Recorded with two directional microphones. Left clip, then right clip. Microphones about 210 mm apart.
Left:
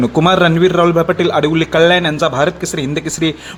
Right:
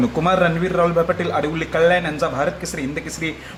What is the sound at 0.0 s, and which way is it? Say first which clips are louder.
A man's voice: left 6 dB; 40° left (ahead or behind).